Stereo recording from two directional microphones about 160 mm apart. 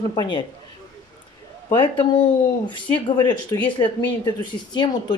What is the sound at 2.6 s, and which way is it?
Speech, 30° left (ahead or behind).